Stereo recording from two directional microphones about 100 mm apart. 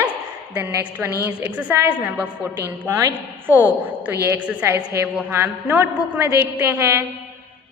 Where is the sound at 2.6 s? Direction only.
25° right (ahead or behind).